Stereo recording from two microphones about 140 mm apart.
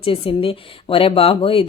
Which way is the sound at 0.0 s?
40° left (ahead or behind).